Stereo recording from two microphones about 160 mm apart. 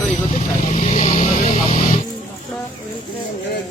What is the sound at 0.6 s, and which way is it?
Vehicle, 45° left (ahead or behind).